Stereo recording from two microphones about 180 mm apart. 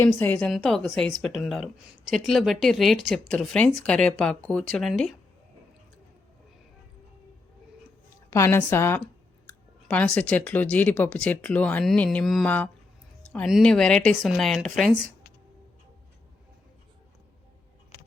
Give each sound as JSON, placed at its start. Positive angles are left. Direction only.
{"t": 0.0, "sound": "speech", "side_deg": 10}
{"t": 8.3, "sound": "speech", "side_deg": 15}